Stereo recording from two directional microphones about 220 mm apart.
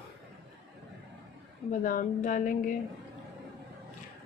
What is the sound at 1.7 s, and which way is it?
A woman's voice, 35° left (ahead or behind).